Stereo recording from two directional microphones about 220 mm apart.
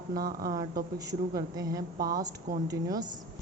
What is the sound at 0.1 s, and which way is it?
Speech, 40° right (ahead or behind).